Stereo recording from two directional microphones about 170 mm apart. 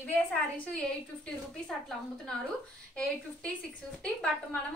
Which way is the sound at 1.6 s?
5° left (ahead or behind).